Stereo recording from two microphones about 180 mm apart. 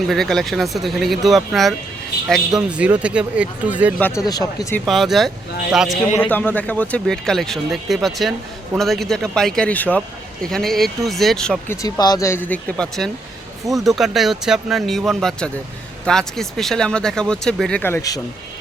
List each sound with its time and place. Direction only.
0.1 s speech: centre (ahead or behind)
4.3 s speech: 20° left (ahead or behind)
4.9 s speech: centre (ahead or behind)
6.1 s speech: 10° left (ahead or behind)
11.7 s speech: 20° left (ahead or behind)